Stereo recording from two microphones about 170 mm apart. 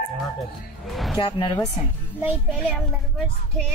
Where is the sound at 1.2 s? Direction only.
25° left (ahead or behind).